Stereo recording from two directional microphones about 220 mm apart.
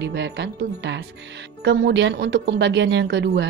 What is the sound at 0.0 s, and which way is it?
A woman's voice, 50° right (ahead or behind).